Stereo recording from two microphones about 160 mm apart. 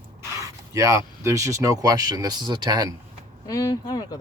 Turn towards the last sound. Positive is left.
turn(degrees=25)  # may be behind; listen again after turning